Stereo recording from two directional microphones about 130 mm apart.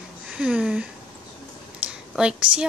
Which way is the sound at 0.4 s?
5° right (ahead or behind).